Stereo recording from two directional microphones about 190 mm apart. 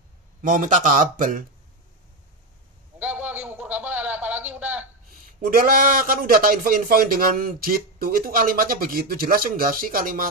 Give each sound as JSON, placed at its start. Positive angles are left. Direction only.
{"t": 0.4, "sound": "speech", "side_deg": -45}
{"t": 3.0, "sound": "a sound", "side_deg": -10}
{"t": 5.6, "sound": "speech", "side_deg": -50}